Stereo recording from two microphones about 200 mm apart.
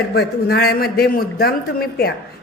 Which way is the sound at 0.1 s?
55° left (ahead or behind).